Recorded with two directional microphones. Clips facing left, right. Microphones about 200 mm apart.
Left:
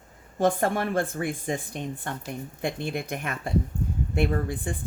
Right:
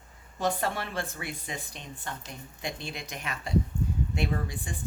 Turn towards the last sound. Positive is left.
turn(degrees=50)  # may be behind; listen again after turning